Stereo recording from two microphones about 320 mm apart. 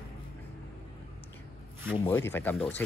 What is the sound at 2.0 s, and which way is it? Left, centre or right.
Speech, centre.